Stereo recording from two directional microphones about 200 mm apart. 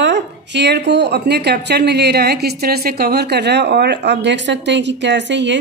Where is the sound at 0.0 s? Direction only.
60° right (ahead or behind).